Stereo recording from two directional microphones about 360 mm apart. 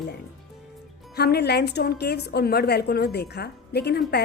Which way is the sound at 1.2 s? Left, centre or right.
Left.